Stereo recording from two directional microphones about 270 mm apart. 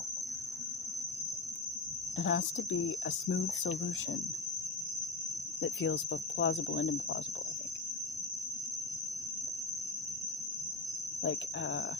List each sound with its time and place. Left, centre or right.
2.1 s speech: left
5.6 s speech: left
11.2 s speech: left